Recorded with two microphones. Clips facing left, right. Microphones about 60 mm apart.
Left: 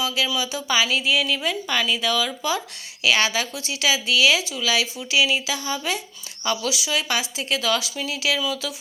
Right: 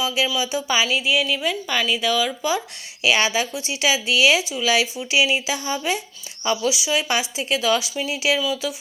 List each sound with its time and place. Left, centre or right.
0.3 s speech: centre